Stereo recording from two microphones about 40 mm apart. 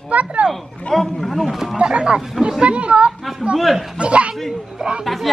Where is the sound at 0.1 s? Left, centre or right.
Right.